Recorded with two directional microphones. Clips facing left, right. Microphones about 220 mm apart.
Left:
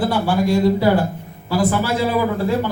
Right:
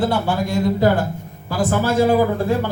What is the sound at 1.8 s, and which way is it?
Speech, 50° right (ahead or behind).